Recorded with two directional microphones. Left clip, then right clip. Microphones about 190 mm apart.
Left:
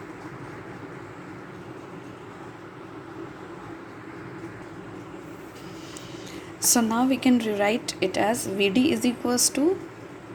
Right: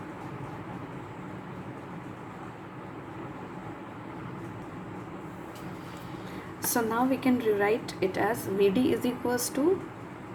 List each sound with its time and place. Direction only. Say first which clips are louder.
6.7 s a woman's voice: left 4 dB; 30° left (ahead or behind)